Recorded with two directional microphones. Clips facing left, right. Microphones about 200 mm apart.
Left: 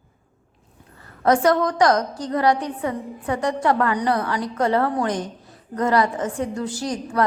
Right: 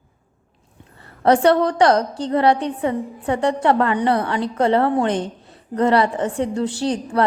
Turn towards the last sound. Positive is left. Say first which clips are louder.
# right 3 dB
turn(degrees=-30)  # may be behind; listen again after turning